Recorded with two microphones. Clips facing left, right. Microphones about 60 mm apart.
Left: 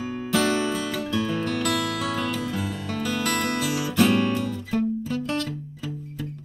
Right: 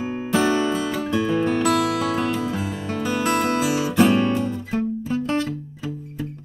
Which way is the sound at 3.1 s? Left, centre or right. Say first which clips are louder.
Right 5 dB; centre.